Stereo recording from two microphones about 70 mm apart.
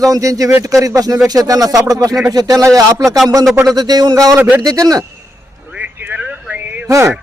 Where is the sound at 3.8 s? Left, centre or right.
Right.